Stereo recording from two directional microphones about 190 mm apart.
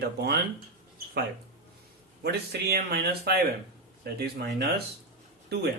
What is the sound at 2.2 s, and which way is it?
Speech, 55° right (ahead or behind).